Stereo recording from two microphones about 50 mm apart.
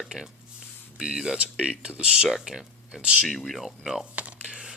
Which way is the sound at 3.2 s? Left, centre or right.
Centre.